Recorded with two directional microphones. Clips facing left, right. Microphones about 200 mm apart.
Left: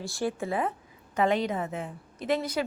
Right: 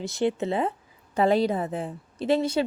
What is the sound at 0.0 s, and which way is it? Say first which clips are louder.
A woman's voice: right 5 dB; 20° right (ahead or behind).